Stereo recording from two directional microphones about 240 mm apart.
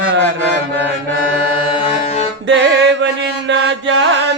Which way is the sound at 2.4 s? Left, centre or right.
Right.